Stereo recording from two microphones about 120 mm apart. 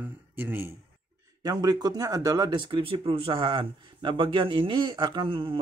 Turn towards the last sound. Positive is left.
turn(degrees=-45)  # may be behind; listen again after turning